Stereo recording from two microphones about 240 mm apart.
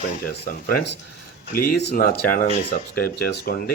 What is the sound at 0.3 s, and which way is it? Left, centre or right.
Speech, left.